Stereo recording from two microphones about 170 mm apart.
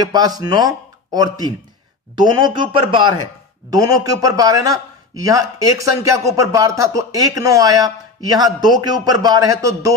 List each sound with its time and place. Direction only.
0.0 s speech: 20° right (ahead or behind)